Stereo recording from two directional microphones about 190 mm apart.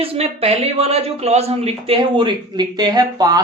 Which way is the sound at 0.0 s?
30° right (ahead or behind).